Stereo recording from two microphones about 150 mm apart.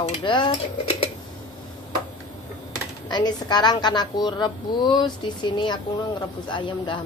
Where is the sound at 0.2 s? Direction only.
30° left (ahead or behind).